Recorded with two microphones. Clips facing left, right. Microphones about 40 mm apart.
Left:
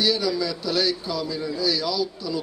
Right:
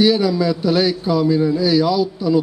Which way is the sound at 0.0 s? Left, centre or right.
Right.